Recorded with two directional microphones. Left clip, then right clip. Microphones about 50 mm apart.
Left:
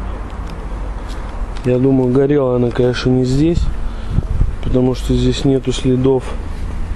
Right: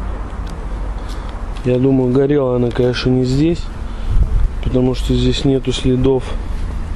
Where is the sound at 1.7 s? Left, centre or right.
Left.